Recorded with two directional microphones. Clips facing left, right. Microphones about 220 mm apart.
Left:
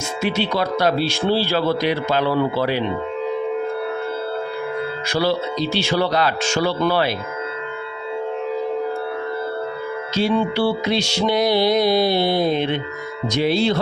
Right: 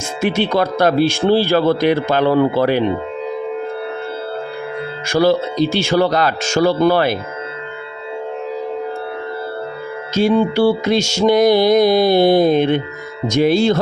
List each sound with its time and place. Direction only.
0.2 s speech: 50° right (ahead or behind)
5.0 s speech: 45° right (ahead or behind)
10.2 s speech: 45° right (ahead or behind)